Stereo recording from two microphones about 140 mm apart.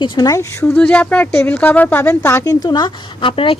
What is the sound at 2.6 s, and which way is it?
Speech, 30° left (ahead or behind).